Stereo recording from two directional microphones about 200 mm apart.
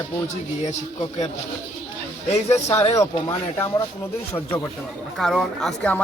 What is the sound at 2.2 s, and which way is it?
Speech, 35° left (ahead or behind).